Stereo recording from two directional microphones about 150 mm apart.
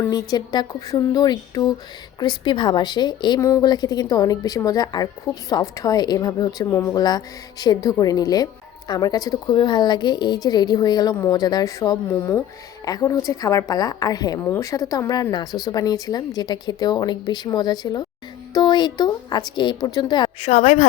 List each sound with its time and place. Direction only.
0.0 s a woman's voice: 25° left (ahead or behind)
20.5 s a woman's voice: 45° left (ahead or behind)